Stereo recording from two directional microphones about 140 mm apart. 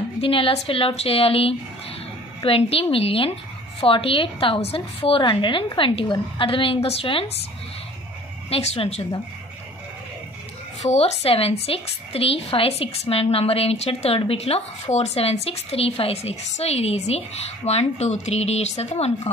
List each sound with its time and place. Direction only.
0.2 s a woman's voice: 40° left (ahead or behind)
8.5 s a woman's voice: 45° left (ahead or behind)
10.8 s a woman's voice: 50° left (ahead or behind)